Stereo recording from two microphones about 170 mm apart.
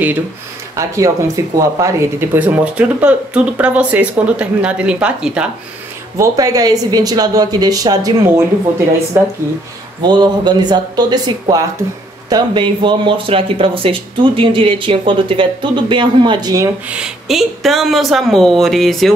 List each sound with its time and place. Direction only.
0.7 s speech: 20° right (ahead or behind)
6.1 s speech: 20° right (ahead or behind)
9.1 s speech: 15° right (ahead or behind)
10.0 s speech: 25° right (ahead or behind)
16.9 s speech: 5° right (ahead or behind)